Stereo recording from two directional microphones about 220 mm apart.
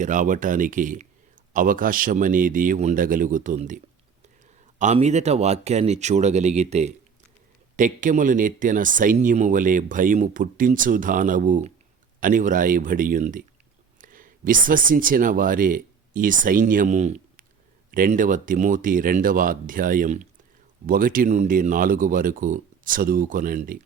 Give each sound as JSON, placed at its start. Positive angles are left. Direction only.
{"t": 0.0, "sound": "speech", "side_deg": -35}
{"t": 4.8, "sound": "speech", "side_deg": -30}